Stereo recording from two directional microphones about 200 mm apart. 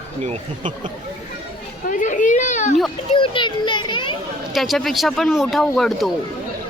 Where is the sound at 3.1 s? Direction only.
25° left (ahead or behind).